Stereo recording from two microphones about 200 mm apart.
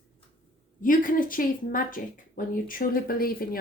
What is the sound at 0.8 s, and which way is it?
Speech, 40° left (ahead or behind).